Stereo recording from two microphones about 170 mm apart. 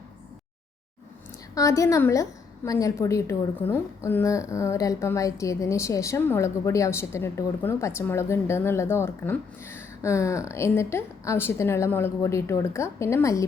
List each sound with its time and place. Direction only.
1.5 s a woman's voice: 20° left (ahead or behind)